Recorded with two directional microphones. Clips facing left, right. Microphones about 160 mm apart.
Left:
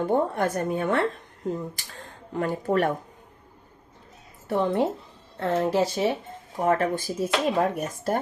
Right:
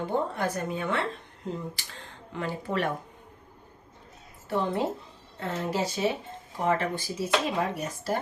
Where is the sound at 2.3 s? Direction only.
45° left (ahead or behind).